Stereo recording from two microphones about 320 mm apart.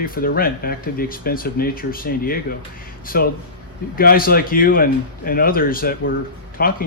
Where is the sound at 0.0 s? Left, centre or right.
Left.